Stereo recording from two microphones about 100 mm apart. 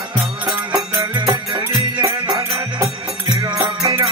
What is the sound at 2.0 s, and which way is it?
Music, 30° right (ahead or behind).